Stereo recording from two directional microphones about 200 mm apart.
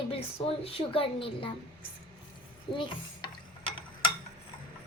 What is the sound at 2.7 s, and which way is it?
Stir, 25° left (ahead or behind).